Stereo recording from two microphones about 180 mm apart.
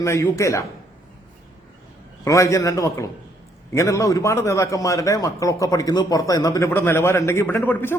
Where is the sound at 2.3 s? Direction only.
15° left (ahead or behind).